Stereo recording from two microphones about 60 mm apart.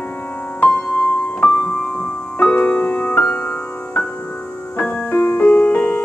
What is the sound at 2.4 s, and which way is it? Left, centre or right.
Music, left.